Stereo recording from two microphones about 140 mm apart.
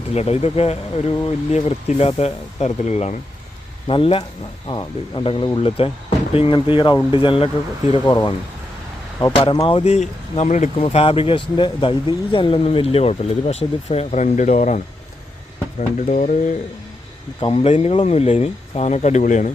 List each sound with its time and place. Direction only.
0.1 s speech: 50° left (ahead or behind)
3.8 s speech: 40° left (ahead or behind)
8.0 s speech: 30° left (ahead or behind)
9.3 s speech: 40° left (ahead or behind); by 10.8 s 55° left (ahead or behind)
10.8 s speech: 40° left (ahead or behind); by 14.8 s 60° left (ahead or behind)
15.8 s speech: 55° left (ahead or behind)
17.4 s speech: 45° left (ahead or behind); by 19.5 s 60° left (ahead or behind)